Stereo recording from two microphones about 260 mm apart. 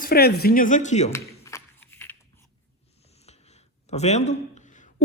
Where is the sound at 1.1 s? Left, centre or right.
Centre.